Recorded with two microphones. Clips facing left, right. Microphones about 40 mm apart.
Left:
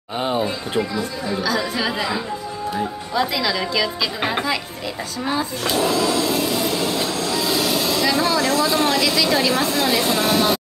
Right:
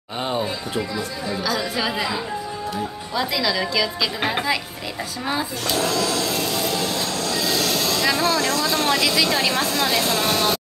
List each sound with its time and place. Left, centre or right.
0.2 s speech: centre
5.7 s train: centre
8.1 s speech: centre